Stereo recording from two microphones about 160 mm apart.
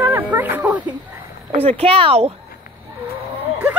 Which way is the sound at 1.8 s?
35° right (ahead or behind).